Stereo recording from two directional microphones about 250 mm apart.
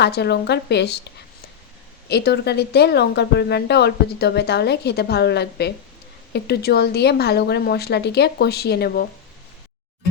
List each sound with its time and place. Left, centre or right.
0.0 s a woman's voice: left
2.0 s a woman's voice: left